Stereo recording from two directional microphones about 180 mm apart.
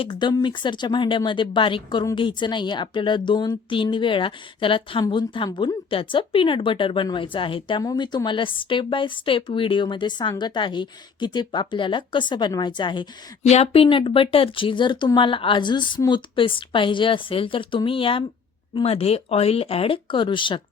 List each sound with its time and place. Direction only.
0.0 s speech: 25° left (ahead or behind)